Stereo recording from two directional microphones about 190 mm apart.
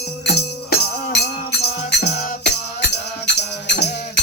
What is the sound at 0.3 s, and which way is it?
Music, 55° left (ahead or behind).